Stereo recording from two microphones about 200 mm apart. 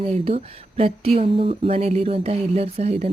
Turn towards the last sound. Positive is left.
turn(degrees=-30)  # may be behind; listen again after turning